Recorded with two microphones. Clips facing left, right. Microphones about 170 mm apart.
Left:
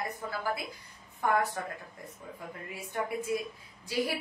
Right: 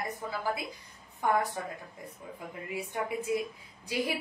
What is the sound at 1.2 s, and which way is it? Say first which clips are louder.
Speech: even; 15° right (ahead or behind).